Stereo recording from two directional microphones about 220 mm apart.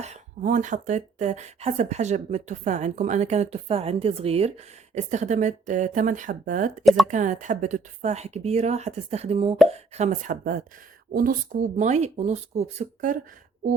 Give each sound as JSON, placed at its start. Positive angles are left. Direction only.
{"t": 0.0, "sound": "speech", "side_deg": -35}
{"t": 6.8, "sound": "a woman's voice", "side_deg": 0}
{"t": 7.1, "sound": "speech", "side_deg": -35}